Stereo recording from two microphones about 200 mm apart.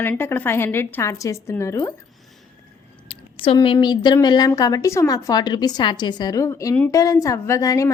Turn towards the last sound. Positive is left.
turn(degrees=15)  # may be behind; listen again after turning